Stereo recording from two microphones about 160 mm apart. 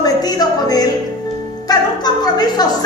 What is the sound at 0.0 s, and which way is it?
Music, 25° left (ahead or behind).